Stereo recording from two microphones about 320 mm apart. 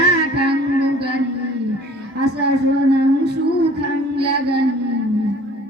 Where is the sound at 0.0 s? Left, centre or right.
Right.